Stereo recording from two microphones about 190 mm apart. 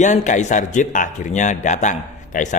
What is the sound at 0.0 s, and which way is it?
A man's voice, 40° left (ahead or behind).